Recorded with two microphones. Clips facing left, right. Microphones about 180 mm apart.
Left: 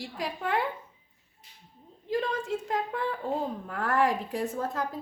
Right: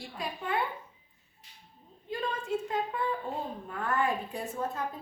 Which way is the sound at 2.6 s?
90° left.